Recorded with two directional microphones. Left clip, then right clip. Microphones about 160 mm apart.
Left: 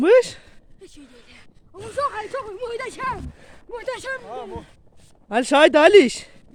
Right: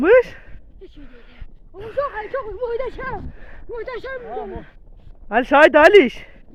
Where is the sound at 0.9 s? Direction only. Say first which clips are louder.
Even; 25° left (ahead or behind).